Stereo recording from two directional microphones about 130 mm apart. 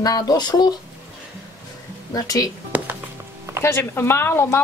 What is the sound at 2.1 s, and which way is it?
Speech, 25° left (ahead or behind).